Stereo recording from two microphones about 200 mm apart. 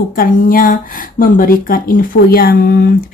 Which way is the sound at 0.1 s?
45° left (ahead or behind).